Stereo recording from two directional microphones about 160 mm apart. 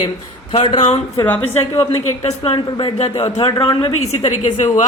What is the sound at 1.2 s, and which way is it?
Speech, 15° left (ahead or behind).